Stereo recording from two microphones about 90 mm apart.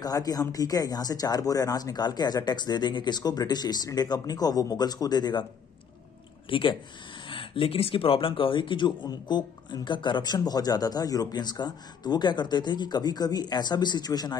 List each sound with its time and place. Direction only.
0.0 s speech: 45° left (ahead or behind)
6.5 s speech: 70° left (ahead or behind); by 14.4 s 50° left (ahead or behind)